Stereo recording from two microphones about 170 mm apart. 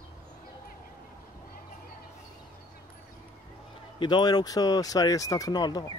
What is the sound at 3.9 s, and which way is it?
Speech, 25° left (ahead or behind).